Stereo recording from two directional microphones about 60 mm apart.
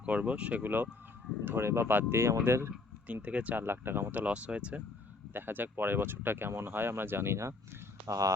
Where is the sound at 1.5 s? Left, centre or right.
Right.